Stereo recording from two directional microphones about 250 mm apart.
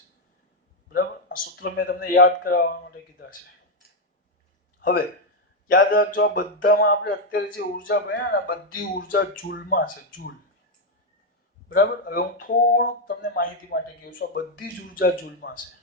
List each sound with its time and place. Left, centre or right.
1.5 s speech: left
4.8 s speech: left
7.9 s speech: left
11.7 s speech: left